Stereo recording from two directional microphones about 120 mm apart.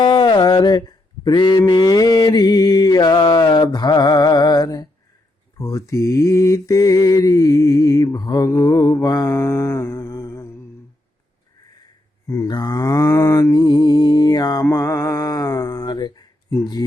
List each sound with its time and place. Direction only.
0.0 s mantra: 40° left (ahead or behind); by 10.6 s 25° left (ahead or behind)
12.5 s mantra: 35° left (ahead or behind)